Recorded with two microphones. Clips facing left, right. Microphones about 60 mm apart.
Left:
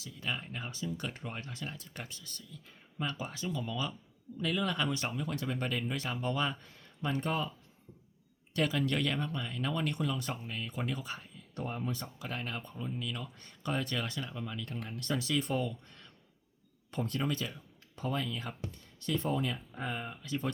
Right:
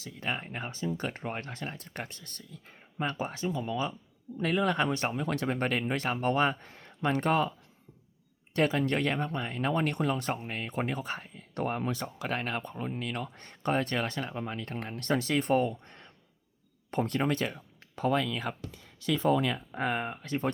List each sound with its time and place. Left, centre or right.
0.0 s speech: right
4.4 s speech: right
5.3 s speech: right
8.5 s speech: right
16.9 s speech: right
17.9 s speech: right